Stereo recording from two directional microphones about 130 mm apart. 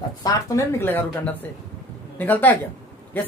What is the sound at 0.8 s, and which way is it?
Speech, 15° left (ahead or behind).